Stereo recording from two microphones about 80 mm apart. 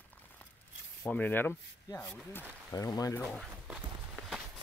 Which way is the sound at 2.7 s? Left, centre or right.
Left.